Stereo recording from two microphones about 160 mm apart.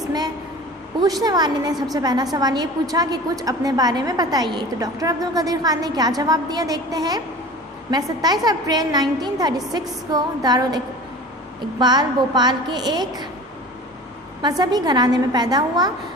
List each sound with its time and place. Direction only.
1.0 s a woman's voice: 25° right (ahead or behind)
11.8 s a woman's voice: 25° right (ahead or behind)
14.4 s a woman's voice: 25° right (ahead or behind)